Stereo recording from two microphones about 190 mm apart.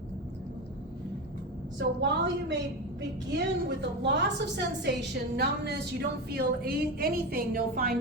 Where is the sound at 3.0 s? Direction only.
65° right (ahead or behind); by 7.9 s 50° right (ahead or behind).